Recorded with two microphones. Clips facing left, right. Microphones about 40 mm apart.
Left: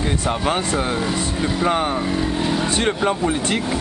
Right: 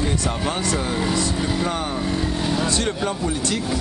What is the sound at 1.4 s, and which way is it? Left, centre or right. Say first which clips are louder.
Speech: left 2 dB; centre.